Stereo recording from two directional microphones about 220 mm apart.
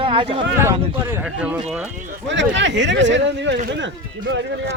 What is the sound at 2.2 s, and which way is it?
Speech, 55° right (ahead or behind).